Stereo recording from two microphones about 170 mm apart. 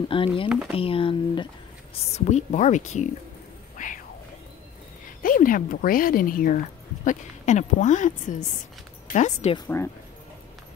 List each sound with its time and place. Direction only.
0.1 s speech: 30° left (ahead or behind)
2.1 s a woman's voice: 40° left (ahead or behind)
3.7 s music: 50° left (ahead or behind)
5.2 s a woman's voice: 55° left (ahead or behind)
7.1 s a woman's voice: 45° left (ahead or behind)